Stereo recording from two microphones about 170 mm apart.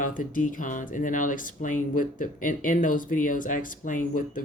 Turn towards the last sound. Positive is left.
turn(degrees=50)  # may be behind; listen again after turning